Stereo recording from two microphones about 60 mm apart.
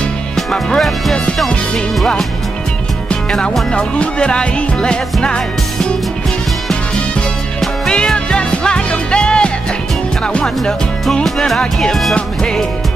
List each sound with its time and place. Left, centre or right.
0.4 s music: centre
2.0 s music: centre
6.7 s music: centre
10.4 s speech: centre